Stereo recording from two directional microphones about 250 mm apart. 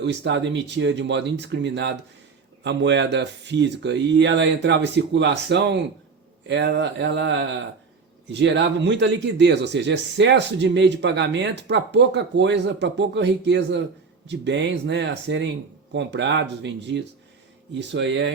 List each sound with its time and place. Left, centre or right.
0.0 s speech: right